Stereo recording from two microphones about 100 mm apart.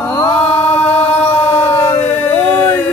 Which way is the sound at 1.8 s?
25° left (ahead or behind).